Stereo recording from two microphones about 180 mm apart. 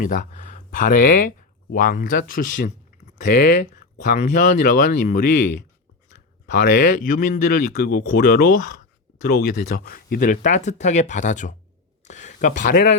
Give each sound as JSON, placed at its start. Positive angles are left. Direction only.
{"t": 0.0, "sound": "speech", "side_deg": 45}
{"t": 3.3, "sound": "speech", "side_deg": 65}
{"t": 4.1, "sound": "speech", "side_deg": 45}
{"t": 6.5, "sound": "speech", "side_deg": 70}
{"t": 7.1, "sound": "speech", "side_deg": 45}
{"t": 7.8, "sound": "speech", "side_deg": 60}